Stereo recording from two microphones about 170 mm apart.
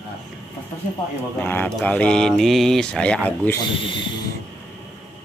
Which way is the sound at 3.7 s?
30° left (ahead or behind).